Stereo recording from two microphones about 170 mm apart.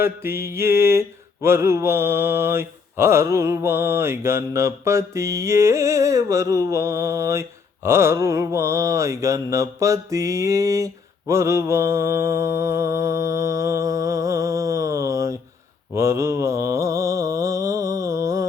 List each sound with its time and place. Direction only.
0.0 s mantra: 15° right (ahead or behind)